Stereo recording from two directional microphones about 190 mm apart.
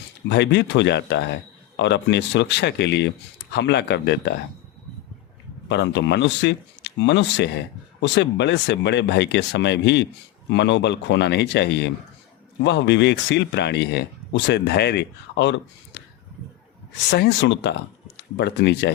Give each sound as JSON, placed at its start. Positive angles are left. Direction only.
{"t": 0.3, "sound": "speech", "side_deg": 65}
{"t": 5.6, "sound": "speech", "side_deg": 65}